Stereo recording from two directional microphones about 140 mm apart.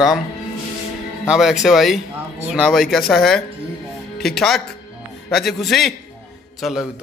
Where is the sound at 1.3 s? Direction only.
Centre (ahead or behind).